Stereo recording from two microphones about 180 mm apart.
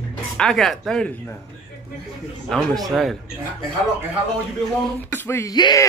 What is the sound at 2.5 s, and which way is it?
Speech, centre (ahead or behind).